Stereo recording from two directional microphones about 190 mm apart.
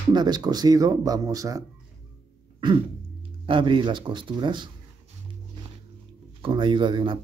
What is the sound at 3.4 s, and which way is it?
Speech, 25° right (ahead or behind).